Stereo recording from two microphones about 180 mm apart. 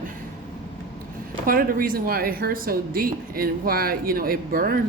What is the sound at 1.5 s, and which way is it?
A woman's voice, 50° right (ahead or behind).